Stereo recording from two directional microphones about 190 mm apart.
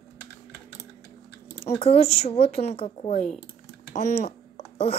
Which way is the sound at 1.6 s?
30° left (ahead or behind).